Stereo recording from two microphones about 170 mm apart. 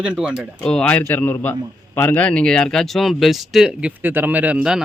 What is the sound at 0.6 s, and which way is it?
A man's voice, 5° left (ahead or behind).